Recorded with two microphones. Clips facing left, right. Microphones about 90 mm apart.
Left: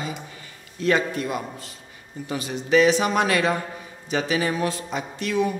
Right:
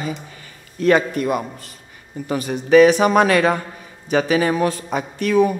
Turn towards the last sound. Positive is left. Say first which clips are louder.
# right 7 dB
turn(degrees=-50)  # may be behind; listen again after turning